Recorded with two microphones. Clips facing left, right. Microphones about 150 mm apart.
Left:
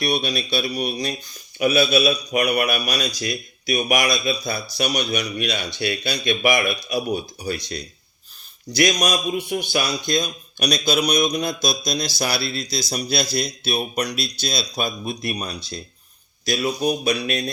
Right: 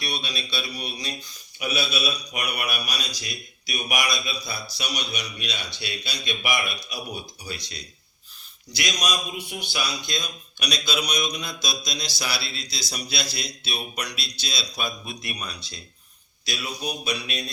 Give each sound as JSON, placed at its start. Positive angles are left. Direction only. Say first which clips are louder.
{"t": 0.0, "sound": "a man's voice", "louder": "left 10 dB", "side_deg": 50}